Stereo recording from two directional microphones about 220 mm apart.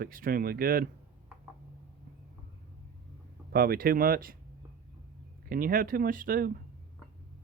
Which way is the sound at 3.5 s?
40° right (ahead or behind).